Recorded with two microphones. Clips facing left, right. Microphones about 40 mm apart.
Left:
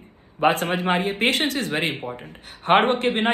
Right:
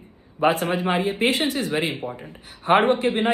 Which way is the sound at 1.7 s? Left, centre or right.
Left.